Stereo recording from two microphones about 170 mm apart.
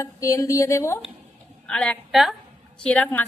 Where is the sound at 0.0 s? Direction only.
20° left (ahead or behind).